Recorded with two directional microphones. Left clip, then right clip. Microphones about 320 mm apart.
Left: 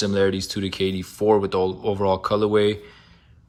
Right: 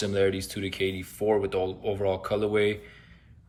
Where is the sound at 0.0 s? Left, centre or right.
Centre.